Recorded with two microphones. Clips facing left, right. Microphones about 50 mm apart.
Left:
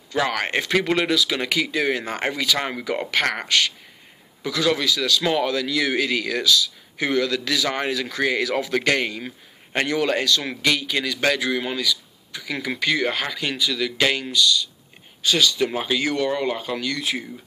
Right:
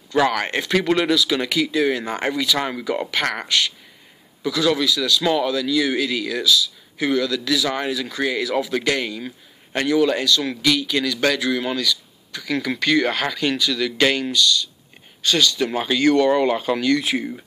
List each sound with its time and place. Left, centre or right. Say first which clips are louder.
0.7 s speech: right 3 dB; centre
1.5 s speech: right 2 dB; left
2.6 s a man's voice: right 2 dB; left
7.0 s speech: right 1 dB; left
10.9 s speech: right 2 dB; left
16.3 s speech: right 6 dB; centre